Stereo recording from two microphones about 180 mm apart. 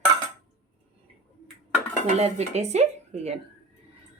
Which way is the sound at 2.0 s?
35° right (ahead or behind).